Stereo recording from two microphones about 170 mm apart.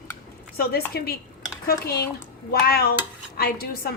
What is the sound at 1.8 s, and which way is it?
A woman's voice, 65° left (ahead or behind).